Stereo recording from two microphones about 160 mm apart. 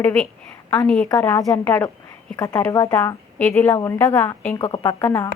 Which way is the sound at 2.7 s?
25° left (ahead or behind).